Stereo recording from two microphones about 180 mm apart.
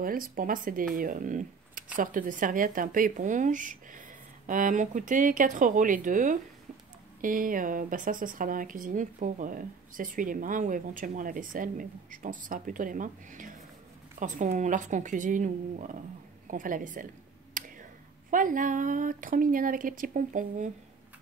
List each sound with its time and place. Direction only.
0.0 s speech: 50° right (ahead or behind)
17.6 s a sound: 50° right (ahead or behind)
18.3 s speech: 50° right (ahead or behind)